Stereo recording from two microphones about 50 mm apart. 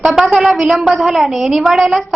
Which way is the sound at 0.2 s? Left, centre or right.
Centre.